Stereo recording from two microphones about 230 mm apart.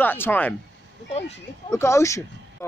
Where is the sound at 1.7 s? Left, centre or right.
Centre.